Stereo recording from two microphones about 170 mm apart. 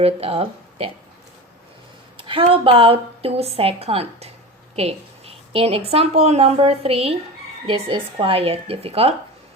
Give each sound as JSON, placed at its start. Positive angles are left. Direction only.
{"t": 0.0, "sound": "a woman's voice", "side_deg": -35}
{"t": 2.1, "sound": "a woman's voice", "side_deg": -30}